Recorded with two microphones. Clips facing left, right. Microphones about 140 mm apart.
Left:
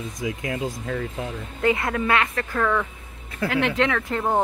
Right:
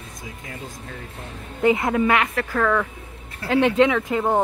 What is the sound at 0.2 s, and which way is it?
Speech, 90° left.